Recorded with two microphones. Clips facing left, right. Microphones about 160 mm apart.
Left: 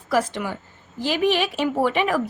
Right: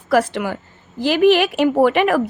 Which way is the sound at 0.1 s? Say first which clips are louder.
Right 5 dB; 65° right (ahead or behind).